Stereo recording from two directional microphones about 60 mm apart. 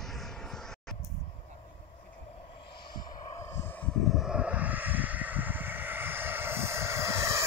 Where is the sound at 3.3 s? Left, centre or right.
Left.